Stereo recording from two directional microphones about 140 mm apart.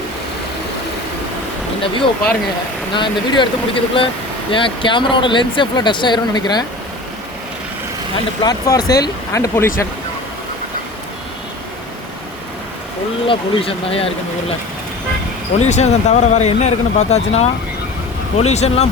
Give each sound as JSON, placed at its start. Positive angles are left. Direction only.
{"t": 2.9, "sound": "speech", "side_deg": 35}
{"t": 8.4, "sound": "speech", "side_deg": 25}
{"t": 13.2, "sound": "speech", "side_deg": 40}
{"t": 15.5, "sound": "speech", "side_deg": 55}